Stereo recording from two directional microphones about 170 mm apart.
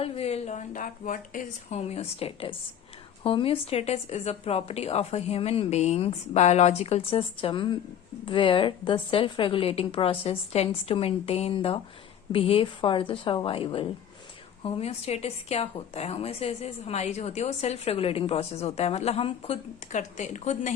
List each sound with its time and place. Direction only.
0.0 s speech: 35° left (ahead or behind)
1.7 s a woman's voice: 40° left (ahead or behind)